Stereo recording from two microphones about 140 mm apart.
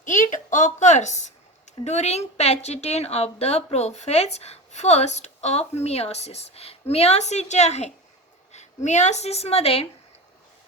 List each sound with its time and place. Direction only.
0.0 s a woman's voice: 65° left (ahead or behind); by 9.8 s 45° left (ahead or behind)